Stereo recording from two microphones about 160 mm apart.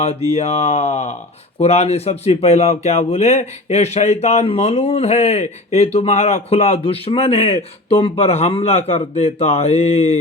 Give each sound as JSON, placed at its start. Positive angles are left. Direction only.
{"t": 0.0, "sound": "speech", "side_deg": 40}